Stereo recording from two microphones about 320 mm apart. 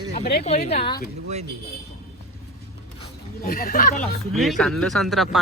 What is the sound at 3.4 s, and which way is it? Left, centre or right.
Speech, left.